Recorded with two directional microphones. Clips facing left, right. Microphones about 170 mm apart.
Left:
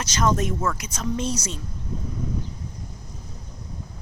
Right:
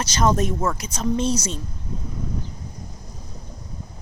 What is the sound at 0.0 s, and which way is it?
Speech, 35° right (ahead or behind).